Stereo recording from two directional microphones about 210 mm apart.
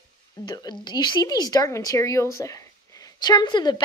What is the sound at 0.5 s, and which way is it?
A woman's voice, 20° left (ahead or behind).